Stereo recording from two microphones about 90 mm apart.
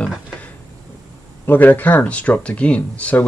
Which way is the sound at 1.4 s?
20° left (ahead or behind).